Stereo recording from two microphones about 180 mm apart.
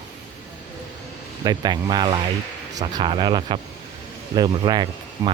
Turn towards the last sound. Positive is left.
turn(degrees=-20)  # may be behind; listen again after turning